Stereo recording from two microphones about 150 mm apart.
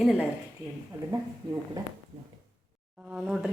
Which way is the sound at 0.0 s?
5° right (ahead or behind).